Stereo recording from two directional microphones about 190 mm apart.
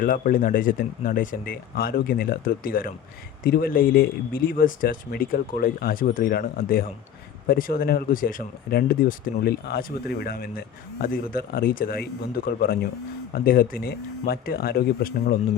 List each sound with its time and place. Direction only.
0.0 s speech: 45° left (ahead or behind)